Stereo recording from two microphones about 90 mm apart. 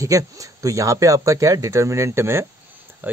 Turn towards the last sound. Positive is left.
turn(degrees=-20)  # may be behind; listen again after turning